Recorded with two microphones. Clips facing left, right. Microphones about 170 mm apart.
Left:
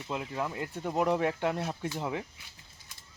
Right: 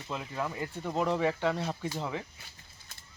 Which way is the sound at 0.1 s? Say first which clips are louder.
Left 1 dB; 10° left (ahead or behind).